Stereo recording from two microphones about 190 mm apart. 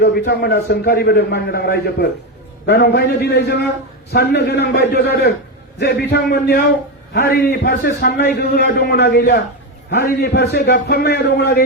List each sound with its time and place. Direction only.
0.0 s a man's voice: 60° left (ahead or behind)